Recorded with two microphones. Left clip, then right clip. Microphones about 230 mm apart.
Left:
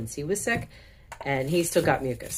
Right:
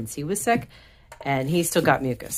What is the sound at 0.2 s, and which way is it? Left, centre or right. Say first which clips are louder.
Speech: right 4 dB; right.